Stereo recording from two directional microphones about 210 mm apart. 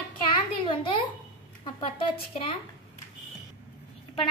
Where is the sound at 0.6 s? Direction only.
25° left (ahead or behind).